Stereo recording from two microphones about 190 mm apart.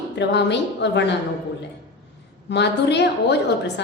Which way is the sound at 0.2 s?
65° left (ahead or behind).